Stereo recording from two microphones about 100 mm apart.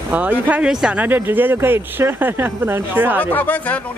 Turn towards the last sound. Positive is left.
turn(degrees=15)  # may be behind; listen again after turning